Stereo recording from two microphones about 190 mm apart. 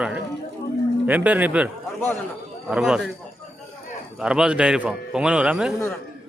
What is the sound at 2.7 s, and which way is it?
Speech, 5° right (ahead or behind).